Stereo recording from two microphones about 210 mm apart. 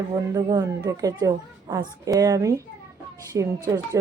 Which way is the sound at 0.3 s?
20° right (ahead or behind).